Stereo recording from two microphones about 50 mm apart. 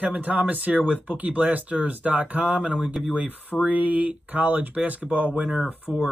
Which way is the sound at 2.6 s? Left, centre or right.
Right.